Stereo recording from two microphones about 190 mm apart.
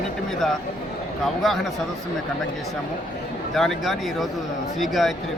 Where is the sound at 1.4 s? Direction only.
Centre (ahead or behind).